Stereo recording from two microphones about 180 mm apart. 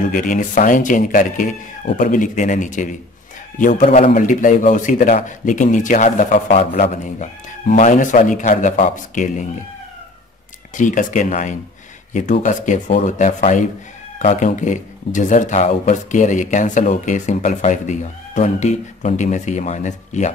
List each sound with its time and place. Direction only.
0.1 s speech: 45° left (ahead or behind)
10.7 s speech: 45° left (ahead or behind)